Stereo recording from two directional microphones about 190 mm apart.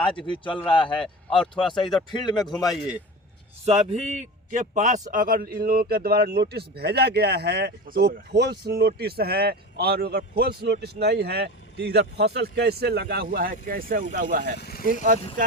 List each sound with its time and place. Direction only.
0.0 s a man's voice: 25° left (ahead or behind)
1.0 s speech: 5° left (ahead or behind)
2.0 s a man's voice: 25° left (ahead or behind)
2.6 s speech: 5° right (ahead or behind)
3.7 s a man's voice: 35° right (ahead or behind)
14.6 s speech: 50° left (ahead or behind)